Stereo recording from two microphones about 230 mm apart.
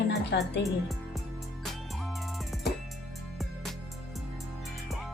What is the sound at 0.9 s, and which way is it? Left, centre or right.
Music, centre.